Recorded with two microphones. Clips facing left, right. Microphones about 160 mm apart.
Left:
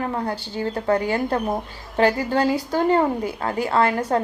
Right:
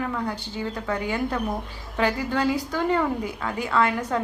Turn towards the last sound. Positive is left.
turn(degrees=35)  # may be behind; listen again after turning